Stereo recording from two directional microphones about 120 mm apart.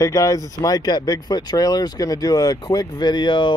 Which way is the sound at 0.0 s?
30° left (ahead or behind).